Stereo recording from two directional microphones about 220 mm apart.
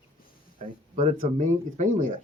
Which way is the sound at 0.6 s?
35° right (ahead or behind).